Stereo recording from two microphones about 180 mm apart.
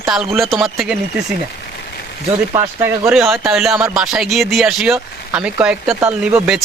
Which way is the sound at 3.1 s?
Centre (ahead or behind).